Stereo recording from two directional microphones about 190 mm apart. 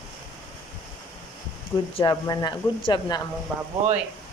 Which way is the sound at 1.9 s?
20° left (ahead or behind).